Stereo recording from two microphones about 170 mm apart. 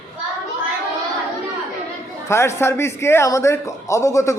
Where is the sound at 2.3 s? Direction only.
15° left (ahead or behind).